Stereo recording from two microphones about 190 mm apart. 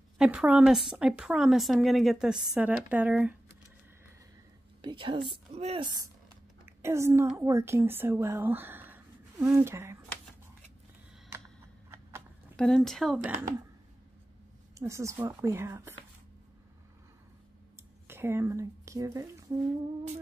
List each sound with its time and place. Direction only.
0.2 s a woman's voice: 5° right (ahead or behind)
4.8 s a woman's voice: 25° right (ahead or behind)
6.8 s speech: 15° right (ahead or behind)
12.5 s a woman's voice: centre (ahead or behind)
14.8 s speech: 15° right (ahead or behind)
18.0 s speech: 10° right (ahead or behind)